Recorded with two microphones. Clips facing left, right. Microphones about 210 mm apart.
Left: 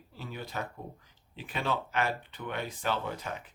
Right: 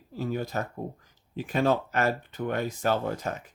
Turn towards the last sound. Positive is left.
turn(degrees=-45)  # may be behind; listen again after turning